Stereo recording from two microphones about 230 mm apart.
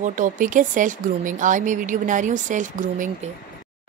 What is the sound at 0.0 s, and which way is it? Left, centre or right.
A woman's voice, right.